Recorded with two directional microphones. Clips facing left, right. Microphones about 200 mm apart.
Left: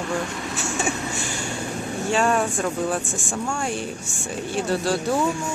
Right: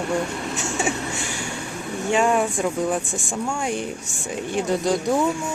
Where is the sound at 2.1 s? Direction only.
15° right (ahead or behind).